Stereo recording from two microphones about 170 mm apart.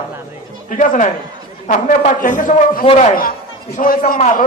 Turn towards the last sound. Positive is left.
turn(degrees=45)  # may be behind; listen again after turning